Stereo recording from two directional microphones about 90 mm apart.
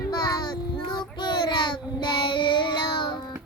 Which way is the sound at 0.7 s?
65° left (ahead or behind).